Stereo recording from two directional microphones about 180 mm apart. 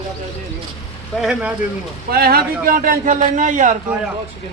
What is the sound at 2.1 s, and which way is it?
A man's voice, 60° right (ahead or behind).